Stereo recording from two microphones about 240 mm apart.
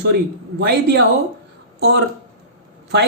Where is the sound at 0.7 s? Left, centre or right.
Right.